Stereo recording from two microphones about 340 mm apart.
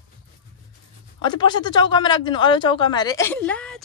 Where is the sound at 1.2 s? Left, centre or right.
Centre.